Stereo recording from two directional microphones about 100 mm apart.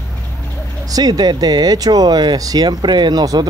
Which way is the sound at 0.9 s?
40° right (ahead or behind).